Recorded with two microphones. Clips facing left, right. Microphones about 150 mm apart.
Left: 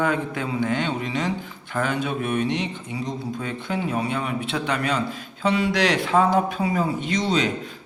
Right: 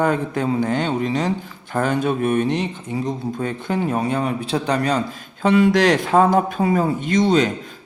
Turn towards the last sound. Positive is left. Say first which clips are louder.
# right 6 dB
turn(degrees=-50)  # may be behind; listen again after turning